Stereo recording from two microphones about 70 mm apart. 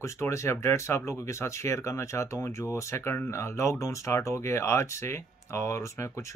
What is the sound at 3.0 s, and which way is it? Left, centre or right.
Speech, left.